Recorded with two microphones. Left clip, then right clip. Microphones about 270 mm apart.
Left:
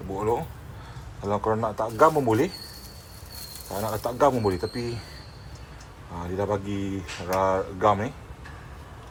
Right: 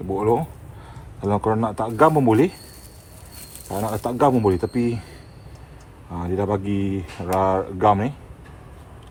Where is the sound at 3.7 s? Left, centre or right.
Right.